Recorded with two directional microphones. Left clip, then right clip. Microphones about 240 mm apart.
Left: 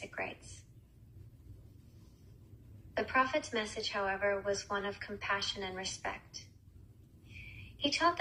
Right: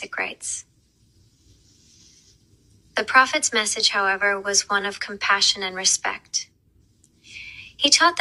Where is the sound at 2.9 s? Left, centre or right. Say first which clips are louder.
Right 14 dB; right.